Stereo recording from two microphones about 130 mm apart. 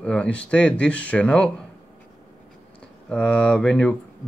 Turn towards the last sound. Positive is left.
turn(degrees=5)  # may be behind; listen again after turning